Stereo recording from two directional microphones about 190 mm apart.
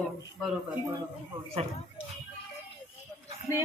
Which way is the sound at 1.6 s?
30° right (ahead or behind).